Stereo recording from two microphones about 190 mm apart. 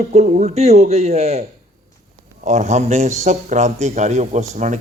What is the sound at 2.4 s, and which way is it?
A man's voice, 40° right (ahead or behind).